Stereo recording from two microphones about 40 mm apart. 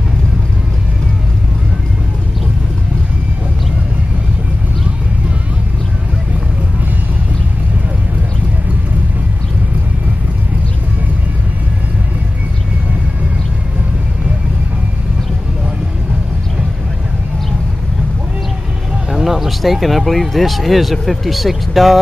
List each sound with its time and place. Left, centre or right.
19.0 s speech: centre